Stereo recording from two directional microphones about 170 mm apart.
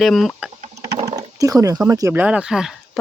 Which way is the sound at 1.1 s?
20° right (ahead or behind).